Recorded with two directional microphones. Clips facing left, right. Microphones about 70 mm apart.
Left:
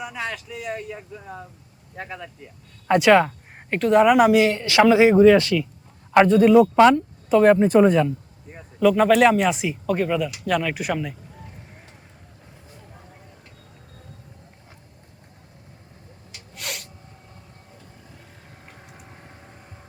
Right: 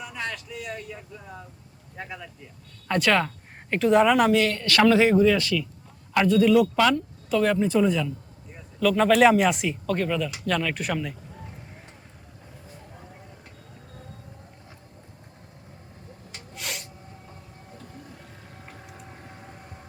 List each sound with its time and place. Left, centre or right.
0.0 s a sound: centre
0.5 s speech: left
1.1 s speech: left
2.0 s speech: centre
3.7 s speech: centre
5.1 s speech: left
9.0 s speech: centre
16.6 s a sound: centre
18.6 s siren: centre